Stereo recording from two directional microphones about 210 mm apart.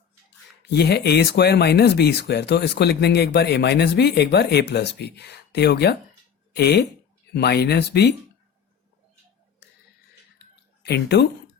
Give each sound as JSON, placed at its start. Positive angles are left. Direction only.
{"t": 0.6, "sound": "speech", "side_deg": 50}
{"t": 10.8, "sound": "speech", "side_deg": 50}